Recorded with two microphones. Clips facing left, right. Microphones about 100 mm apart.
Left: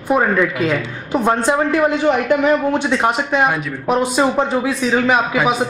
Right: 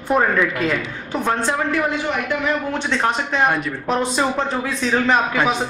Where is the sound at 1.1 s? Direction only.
15° left (ahead or behind).